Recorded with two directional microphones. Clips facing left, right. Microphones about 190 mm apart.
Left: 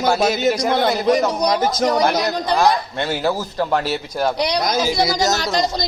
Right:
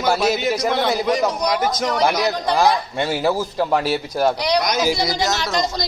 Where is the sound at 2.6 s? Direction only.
5° right (ahead or behind).